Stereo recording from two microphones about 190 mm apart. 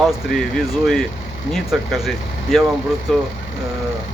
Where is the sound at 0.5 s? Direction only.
Centre (ahead or behind).